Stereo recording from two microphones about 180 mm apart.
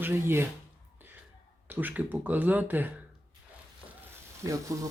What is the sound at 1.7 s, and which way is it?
Speech, 10° right (ahead or behind).